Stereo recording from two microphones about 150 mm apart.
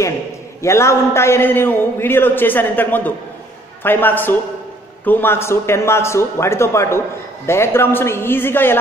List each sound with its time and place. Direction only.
0.6 s a man's voice: 20° left (ahead or behind)